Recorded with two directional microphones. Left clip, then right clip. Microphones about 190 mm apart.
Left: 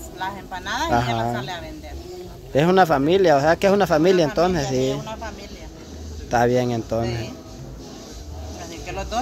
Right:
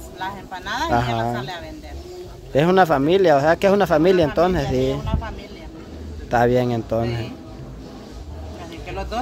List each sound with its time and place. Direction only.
0.2 s speech: 15° left (ahead or behind)
2.5 s speech: centre (ahead or behind)
5.0 s a sound: 15° left (ahead or behind)
6.3 s speech: centre (ahead or behind)
8.8 s speech: 10° left (ahead or behind)